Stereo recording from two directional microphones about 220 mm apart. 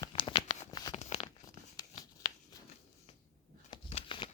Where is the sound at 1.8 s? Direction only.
15° left (ahead or behind).